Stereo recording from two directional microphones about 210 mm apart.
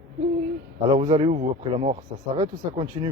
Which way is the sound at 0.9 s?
30° right (ahead or behind).